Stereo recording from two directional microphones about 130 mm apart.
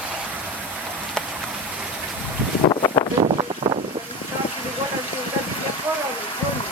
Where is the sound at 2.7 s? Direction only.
35° left (ahead or behind).